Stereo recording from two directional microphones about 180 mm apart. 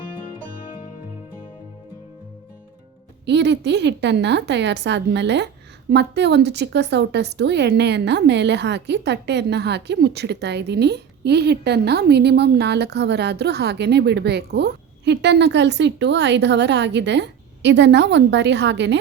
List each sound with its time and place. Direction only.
3.2 s a woman's voice: 75° right (ahead or behind)